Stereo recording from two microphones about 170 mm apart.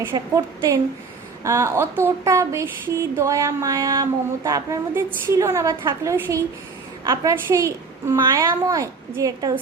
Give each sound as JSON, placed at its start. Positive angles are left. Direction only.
{"t": 0.0, "sound": "a woman's voice", "side_deg": -20}